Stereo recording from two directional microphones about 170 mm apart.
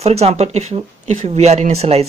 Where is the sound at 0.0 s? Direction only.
40° right (ahead or behind).